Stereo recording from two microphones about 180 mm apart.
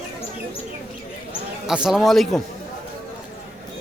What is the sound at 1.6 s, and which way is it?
Speech, 5° right (ahead or behind).